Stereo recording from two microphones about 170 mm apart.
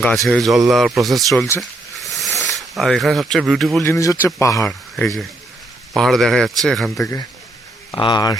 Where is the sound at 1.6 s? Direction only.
Centre (ahead or behind).